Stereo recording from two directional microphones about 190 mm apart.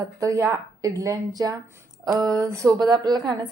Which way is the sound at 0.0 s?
15° right (ahead or behind).